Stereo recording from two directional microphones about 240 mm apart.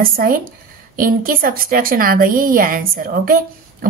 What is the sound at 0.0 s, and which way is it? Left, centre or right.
A woman's voice, right.